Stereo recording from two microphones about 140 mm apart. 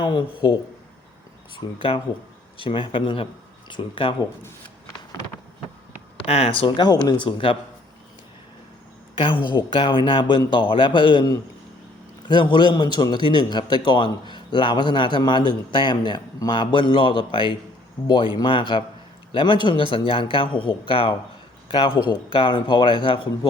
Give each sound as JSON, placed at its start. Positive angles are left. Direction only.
{"t": 0.0, "sound": "a man's voice", "side_deg": 35}
{"t": 2.6, "sound": "a man's voice", "side_deg": 35}
{"t": 6.2, "sound": "a man's voice", "side_deg": 45}
{"t": 9.1, "sound": "a man's voice", "side_deg": 35}